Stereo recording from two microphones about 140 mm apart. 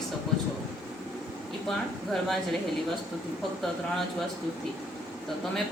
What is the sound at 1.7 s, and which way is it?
Speech, centre (ahead or behind).